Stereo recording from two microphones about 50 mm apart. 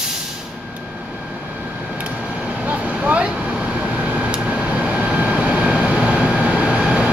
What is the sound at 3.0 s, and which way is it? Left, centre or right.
Vehicle, right.